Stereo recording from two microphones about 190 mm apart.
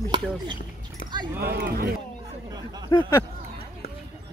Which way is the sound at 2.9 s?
20° left (ahead or behind).